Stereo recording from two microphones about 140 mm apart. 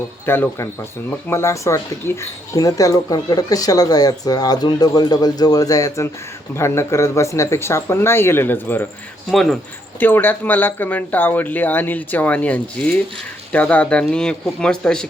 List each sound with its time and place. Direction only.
0.3 s speech: 15° left (ahead or behind)
9.3 s speech: centre (ahead or behind)
10.0 s speech: 15° left (ahead or behind)